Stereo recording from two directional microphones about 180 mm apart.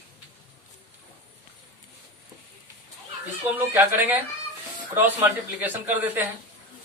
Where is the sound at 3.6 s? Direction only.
10° right (ahead or behind).